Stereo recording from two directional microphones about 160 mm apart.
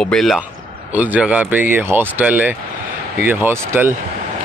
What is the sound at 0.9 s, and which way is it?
Speech, 10° right (ahead or behind).